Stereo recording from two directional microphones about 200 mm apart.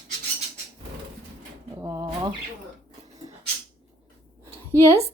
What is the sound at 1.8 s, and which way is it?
Speech, 15° right (ahead or behind).